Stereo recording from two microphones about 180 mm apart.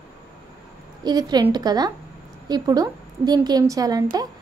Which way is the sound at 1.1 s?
20° right (ahead or behind).